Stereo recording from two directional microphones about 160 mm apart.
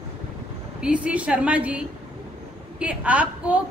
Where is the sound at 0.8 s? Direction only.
10° right (ahead or behind).